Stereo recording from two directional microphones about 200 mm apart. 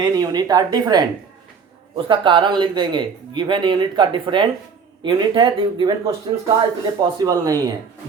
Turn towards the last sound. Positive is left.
turn(degrees=-20)  # may be behind; listen again after turning